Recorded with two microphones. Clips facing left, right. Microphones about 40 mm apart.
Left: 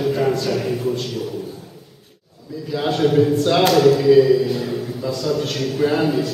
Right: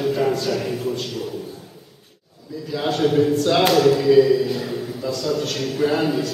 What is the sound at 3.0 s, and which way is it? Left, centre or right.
A man's voice, centre.